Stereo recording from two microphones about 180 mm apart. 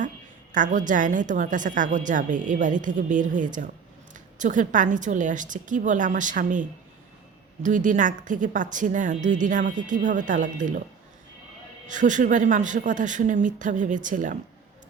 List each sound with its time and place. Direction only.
0.5 s speech: 45° right (ahead or behind)
11.9 s speech: 45° right (ahead or behind)